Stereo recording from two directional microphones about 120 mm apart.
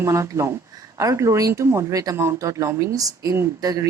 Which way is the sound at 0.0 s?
25° right (ahead or behind).